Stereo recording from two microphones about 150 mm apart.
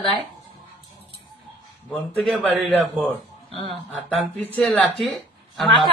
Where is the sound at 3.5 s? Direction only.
35° left (ahead or behind).